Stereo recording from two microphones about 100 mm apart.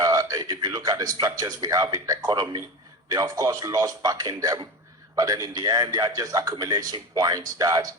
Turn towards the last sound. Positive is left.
turn(degrees=-35)  # may be behind; listen again after turning